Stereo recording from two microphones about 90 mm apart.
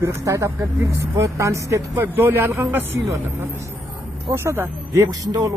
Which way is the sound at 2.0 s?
20° right (ahead or behind).